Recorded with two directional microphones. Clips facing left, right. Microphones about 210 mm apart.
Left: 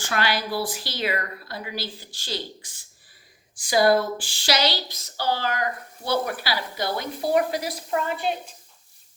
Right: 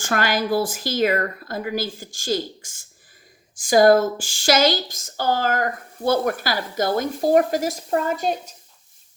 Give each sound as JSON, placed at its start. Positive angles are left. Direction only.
{"t": 0.0, "sound": "a woman's voice", "side_deg": -45}